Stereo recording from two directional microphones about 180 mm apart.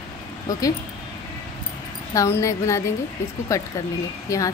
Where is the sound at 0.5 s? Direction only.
20° left (ahead or behind).